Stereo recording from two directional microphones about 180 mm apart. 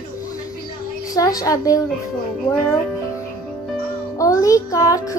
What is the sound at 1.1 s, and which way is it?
Speech, 20° left (ahead or behind).